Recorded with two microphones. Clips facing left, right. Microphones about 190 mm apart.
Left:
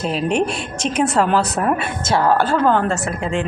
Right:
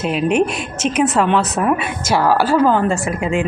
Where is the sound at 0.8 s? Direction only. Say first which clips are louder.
Right 3 dB; 30° left (ahead or behind).